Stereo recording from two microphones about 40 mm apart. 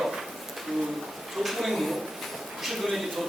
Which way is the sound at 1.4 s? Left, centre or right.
Centre.